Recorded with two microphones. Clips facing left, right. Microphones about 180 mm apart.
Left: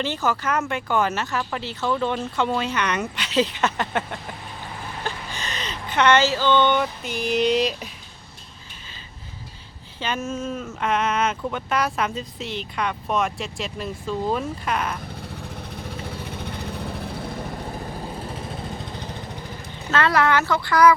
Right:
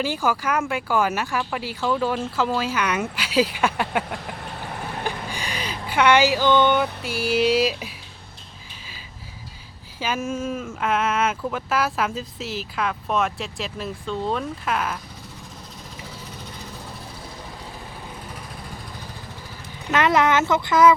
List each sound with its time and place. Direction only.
0.0 s speech: 10° right (ahead or behind)
10.0 s speech: 10° right (ahead or behind)
15.7 s vehicle: 60° left (ahead or behind)
19.9 s speech: 20° right (ahead or behind)